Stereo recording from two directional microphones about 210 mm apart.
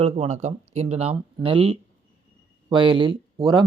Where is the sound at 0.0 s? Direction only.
30° right (ahead or behind).